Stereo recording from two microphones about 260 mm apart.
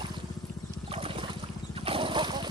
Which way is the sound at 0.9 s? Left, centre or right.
Right.